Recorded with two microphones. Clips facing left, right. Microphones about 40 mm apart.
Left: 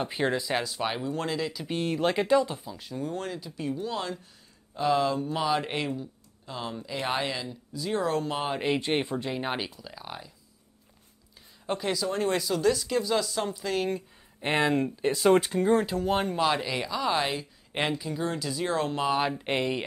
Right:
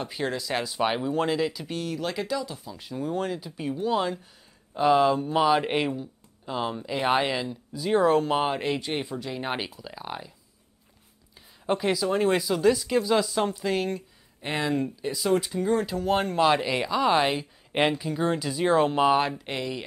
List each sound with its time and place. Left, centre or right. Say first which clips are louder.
0.0 s speech: left 2 dB; left
0.5 s speech: even; centre
0.7 s speech: right 5 dB; centre
1.7 s speech: left 3 dB; left
2.8 s speech: right 6 dB; centre
8.7 s speech: left 2 dB; left
9.4 s speech: right 1 dB; centre
11.6 s speech: right 4 dB; centre
13.9 s speech: left 1 dB; left
15.6 s speech: left 1 dB; centre
16.0 s speech: right 3 dB; centre
19.3 s speech: left 3 dB; left